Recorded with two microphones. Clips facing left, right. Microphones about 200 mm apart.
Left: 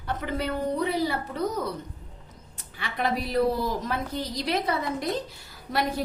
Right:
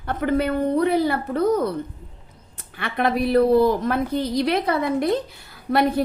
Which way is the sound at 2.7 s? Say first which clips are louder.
Right 6 dB; 60° right (ahead or behind).